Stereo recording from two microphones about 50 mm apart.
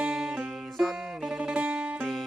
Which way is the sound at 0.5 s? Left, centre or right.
Centre.